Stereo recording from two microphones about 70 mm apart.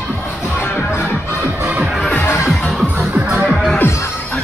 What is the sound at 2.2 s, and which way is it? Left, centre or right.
Music, left.